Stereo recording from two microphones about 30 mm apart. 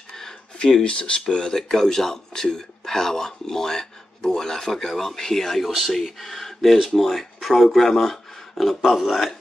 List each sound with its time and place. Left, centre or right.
0.6 s speech: centre
0.8 s speech: left
1.6 s speech: centre
5.6 s speech: centre